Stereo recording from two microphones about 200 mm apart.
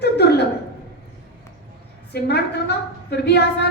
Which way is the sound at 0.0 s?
55° left (ahead or behind).